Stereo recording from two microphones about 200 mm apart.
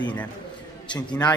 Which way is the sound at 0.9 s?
20° left (ahead or behind).